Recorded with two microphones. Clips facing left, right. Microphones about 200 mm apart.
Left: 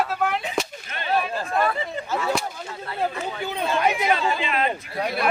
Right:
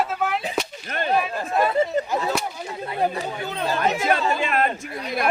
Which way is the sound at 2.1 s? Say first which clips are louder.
Right 1 dB; 15° right (ahead or behind).